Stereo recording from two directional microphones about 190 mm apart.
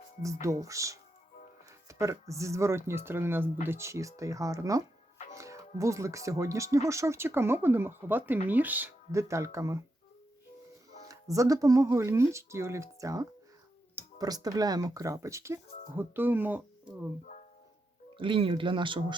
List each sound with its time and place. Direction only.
0.4 s speech: 15° right (ahead or behind)
11.1 s speech: 15° right (ahead or behind)
18.2 s speech: 25° right (ahead or behind)